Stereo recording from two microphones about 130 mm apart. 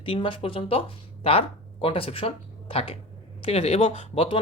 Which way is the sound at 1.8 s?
45° left (ahead or behind).